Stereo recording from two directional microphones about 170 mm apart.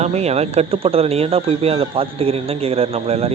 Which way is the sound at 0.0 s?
40° right (ahead or behind).